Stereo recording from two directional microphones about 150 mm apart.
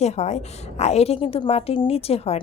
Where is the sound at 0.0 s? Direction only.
50° left (ahead or behind).